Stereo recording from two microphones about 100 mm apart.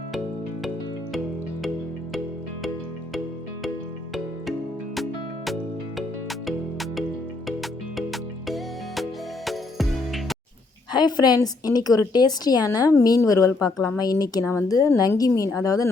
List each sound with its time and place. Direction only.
6.0 s music: centre (ahead or behind)
10.9 s a woman's voice: 45° left (ahead or behind)